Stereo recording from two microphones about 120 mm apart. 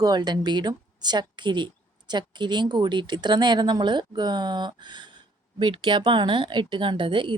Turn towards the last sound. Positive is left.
turn(degrees=-45)  # may be behind; listen again after turning